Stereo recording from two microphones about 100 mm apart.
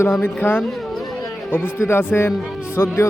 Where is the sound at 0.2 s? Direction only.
20° left (ahead or behind).